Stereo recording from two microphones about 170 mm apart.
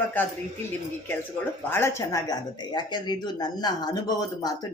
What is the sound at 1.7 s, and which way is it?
Speech, 15° left (ahead or behind).